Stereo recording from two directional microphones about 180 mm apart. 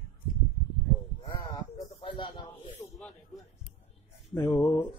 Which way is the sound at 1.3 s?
25° left (ahead or behind).